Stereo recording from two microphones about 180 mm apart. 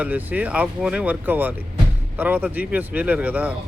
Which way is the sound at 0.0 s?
10° right (ahead or behind).